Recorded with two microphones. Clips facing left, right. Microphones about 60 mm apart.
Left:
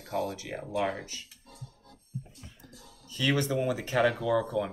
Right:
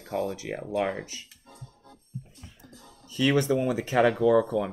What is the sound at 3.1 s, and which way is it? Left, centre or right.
Speech, right.